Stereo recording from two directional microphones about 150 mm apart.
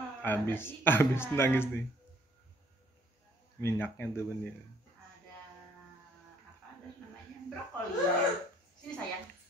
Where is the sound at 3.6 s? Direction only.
15° left (ahead or behind).